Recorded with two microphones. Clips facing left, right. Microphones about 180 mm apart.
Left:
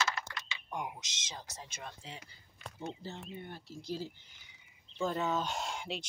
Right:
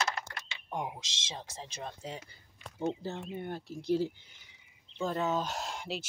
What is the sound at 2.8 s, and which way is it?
Speech, 60° right (ahead or behind).